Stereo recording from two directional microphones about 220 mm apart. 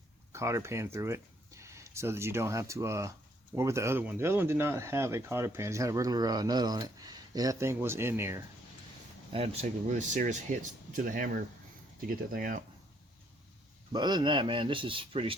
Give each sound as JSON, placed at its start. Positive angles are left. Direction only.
{"t": 0.3, "sound": "speech", "side_deg": -15}
{"t": 9.3, "sound": "speech", "side_deg": -30}
{"t": 13.9, "sound": "speech", "side_deg": -20}